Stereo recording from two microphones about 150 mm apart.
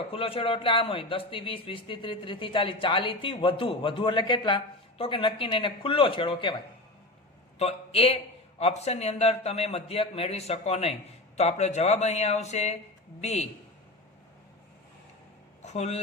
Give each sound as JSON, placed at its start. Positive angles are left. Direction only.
{"t": 0.1, "sound": "speech", "side_deg": 40}
{"t": 7.6, "sound": "a man's voice", "side_deg": 40}
{"t": 15.6, "sound": "speech", "side_deg": 50}